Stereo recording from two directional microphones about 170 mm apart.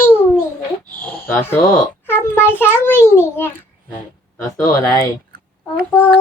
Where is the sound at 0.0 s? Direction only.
15° left (ahead or behind).